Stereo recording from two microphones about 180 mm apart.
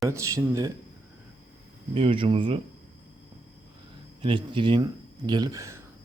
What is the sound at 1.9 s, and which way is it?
Speech, 30° right (ahead or behind).